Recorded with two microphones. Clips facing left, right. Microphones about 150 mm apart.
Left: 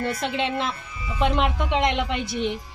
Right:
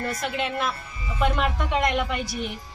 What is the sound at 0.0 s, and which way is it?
A woman's voice, 25° left (ahead or behind).